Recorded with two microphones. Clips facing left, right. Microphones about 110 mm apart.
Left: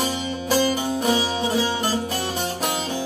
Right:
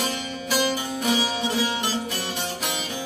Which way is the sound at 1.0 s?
35° left (ahead or behind).